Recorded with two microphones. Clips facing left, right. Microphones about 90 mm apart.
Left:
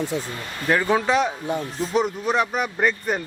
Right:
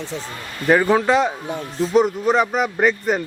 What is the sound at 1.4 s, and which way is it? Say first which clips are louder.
Speech: right 2 dB; centre (ahead or behind).